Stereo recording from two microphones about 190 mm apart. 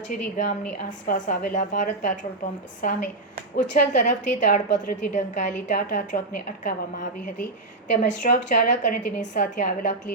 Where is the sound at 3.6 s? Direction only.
40° left (ahead or behind).